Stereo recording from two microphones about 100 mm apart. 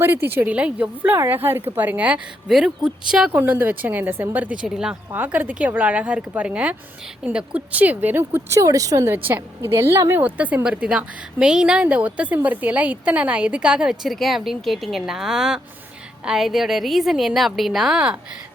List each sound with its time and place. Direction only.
0.0 s speech: 20° right (ahead or behind)
2.5 s a woman's voice: 5° right (ahead or behind)
5.1 s a woman's voice: 20° right (ahead or behind); by 9.1 s 35° right (ahead or behind)
9.1 s a woman's voice: 20° right (ahead or behind)